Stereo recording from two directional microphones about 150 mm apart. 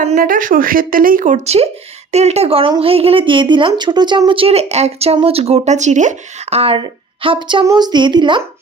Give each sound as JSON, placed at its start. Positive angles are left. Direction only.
{"t": 0.0, "sound": "a woman's voice", "side_deg": -60}